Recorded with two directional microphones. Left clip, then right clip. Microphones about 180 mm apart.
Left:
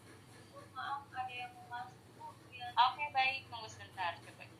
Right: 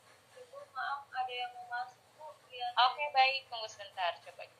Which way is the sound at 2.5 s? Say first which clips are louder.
Right 2 dB; 30° right (ahead or behind).